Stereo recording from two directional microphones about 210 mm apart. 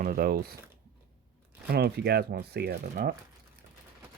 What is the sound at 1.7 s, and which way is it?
Speech, 50° right (ahead or behind).